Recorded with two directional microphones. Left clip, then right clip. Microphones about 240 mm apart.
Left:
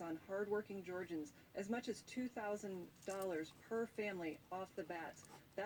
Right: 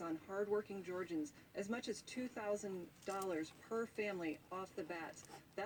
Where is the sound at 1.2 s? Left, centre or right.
Right.